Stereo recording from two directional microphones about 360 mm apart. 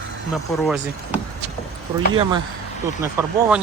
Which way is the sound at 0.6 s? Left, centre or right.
Centre.